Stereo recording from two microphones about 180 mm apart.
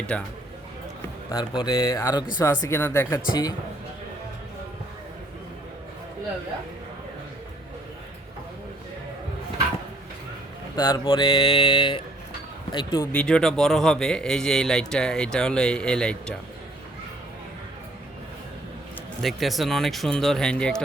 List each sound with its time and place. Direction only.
0.1 s speech: 5° left (ahead or behind)
1.3 s speech: 25° left (ahead or behind)
10.8 s speech: 25° left (ahead or behind)
13.1 s a man's voice: 5° left (ahead or behind)
19.2 s a man's voice: centre (ahead or behind)